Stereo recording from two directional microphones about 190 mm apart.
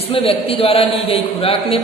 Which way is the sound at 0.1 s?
30° left (ahead or behind).